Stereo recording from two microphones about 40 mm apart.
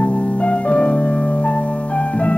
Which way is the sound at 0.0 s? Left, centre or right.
Left.